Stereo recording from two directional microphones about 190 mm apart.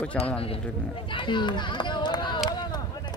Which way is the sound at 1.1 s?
25° left (ahead or behind).